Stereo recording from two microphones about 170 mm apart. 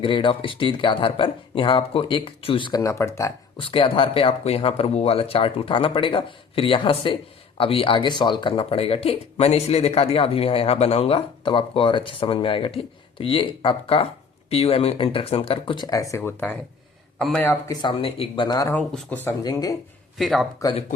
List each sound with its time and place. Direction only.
0.0 s speech: 30° left (ahead or behind)
3.6 s speech: 30° left (ahead or behind); by 17.5 s 5° left (ahead or behind)
17.5 s speech: 20° left (ahead or behind)
18.7 s speech: 5° left (ahead or behind)
19.2 s speech: 20° left (ahead or behind)
20.1 s speech: centre (ahead or behind)